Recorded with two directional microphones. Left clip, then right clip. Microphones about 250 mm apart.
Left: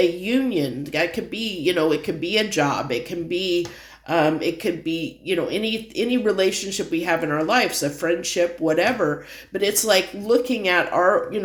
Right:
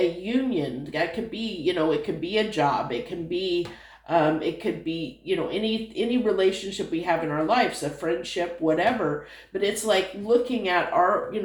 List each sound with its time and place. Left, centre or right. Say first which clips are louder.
0.3 s speech: left 4 dB; left